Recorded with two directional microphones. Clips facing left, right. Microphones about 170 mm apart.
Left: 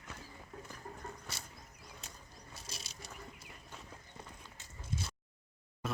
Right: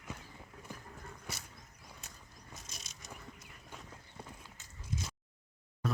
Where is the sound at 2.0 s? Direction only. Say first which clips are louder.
Left 2 dB; 30° left (ahead or behind).